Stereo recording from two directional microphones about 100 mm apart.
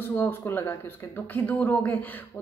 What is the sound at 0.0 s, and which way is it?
A woman's voice, 20° left (ahead or behind).